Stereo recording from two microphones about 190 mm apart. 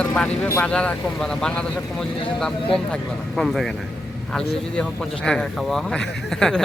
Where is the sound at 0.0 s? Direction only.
10° left (ahead or behind).